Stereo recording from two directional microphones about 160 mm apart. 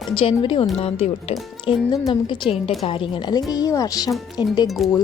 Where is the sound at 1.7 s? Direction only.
30° left (ahead or behind).